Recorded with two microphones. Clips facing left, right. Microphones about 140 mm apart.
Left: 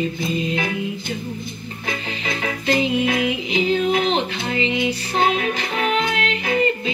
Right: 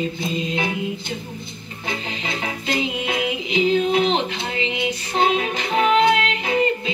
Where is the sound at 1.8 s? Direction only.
30° right (ahead or behind).